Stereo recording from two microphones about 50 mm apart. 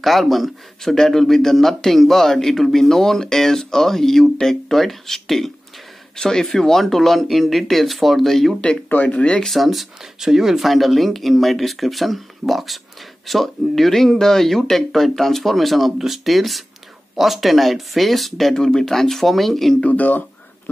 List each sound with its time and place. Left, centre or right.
0.0 s a man's voice: centre
8.8 s speech: left
9.2 s speech: left
9.5 s speech: centre
19.8 s speech: left